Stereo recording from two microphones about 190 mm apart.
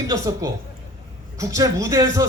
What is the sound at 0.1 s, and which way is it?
A man's voice, 15° right (ahead or behind).